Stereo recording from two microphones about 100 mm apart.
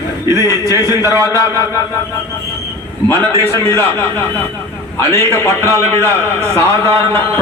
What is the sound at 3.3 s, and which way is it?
Speech, 30° right (ahead or behind).